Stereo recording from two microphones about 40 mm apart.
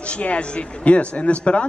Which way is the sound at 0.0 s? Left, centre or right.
Left.